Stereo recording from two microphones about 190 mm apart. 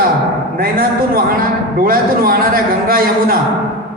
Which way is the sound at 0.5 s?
50° right (ahead or behind).